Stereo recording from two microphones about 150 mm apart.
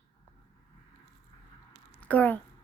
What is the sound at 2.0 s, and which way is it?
Speech, 10° left (ahead or behind).